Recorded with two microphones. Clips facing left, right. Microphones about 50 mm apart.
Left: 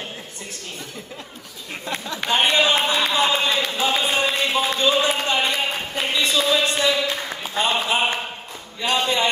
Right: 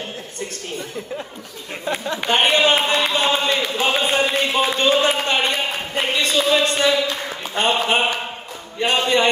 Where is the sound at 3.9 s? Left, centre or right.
Centre.